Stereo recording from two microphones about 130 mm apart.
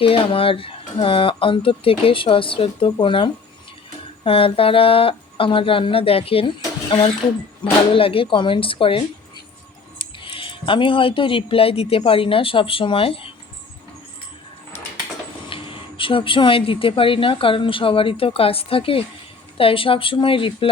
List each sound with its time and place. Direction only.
0.0 s a woman's voice: 45° left (ahead or behind)
7.6 s a woman's voice: 45° left (ahead or behind)
10.3 s a woman's voice: 40° left (ahead or behind)
15.4 s a woman's voice: 40° left (ahead or behind)